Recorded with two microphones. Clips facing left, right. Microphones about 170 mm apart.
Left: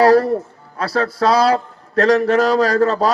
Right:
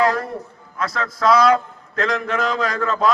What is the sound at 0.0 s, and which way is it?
A man's voice, 35° left (ahead or behind).